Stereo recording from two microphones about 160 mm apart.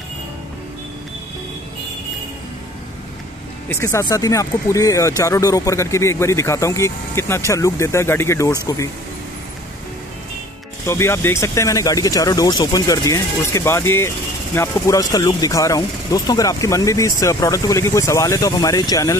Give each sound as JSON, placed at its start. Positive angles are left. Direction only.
{"t": 3.6, "sound": "speech", "side_deg": 20}
{"t": 10.9, "sound": "speech", "side_deg": 15}